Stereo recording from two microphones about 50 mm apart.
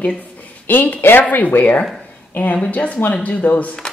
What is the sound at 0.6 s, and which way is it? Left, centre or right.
Speech, left.